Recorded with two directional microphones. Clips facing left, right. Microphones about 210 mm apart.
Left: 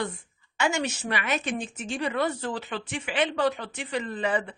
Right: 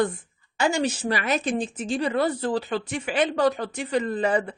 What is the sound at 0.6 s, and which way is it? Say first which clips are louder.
Speech: right 4 dB; 35° right (ahead or behind).